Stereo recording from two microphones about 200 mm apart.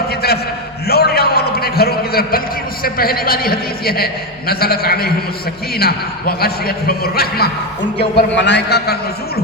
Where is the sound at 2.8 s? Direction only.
50° left (ahead or behind).